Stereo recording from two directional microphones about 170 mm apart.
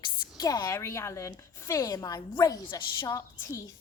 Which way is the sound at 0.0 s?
20° left (ahead or behind).